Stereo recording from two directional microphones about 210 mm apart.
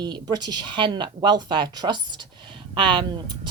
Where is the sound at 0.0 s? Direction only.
20° right (ahead or behind).